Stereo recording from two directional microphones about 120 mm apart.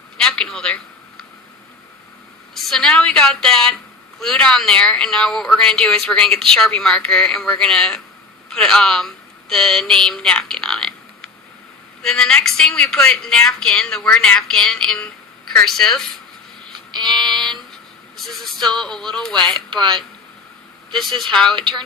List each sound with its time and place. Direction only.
0.3 s a sound: 5° left (ahead or behind)
2.6 s a woman's voice: 5° left (ahead or behind)
16.9 s a sound: 35° right (ahead or behind)
18.3 s a woman's voice: centre (ahead or behind)
19.7 s speech: 40° right (ahead or behind)
21.2 s a woman's voice: 5° left (ahead or behind)